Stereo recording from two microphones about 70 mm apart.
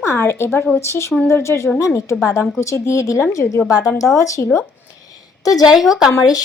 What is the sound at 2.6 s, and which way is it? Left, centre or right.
Speech, left.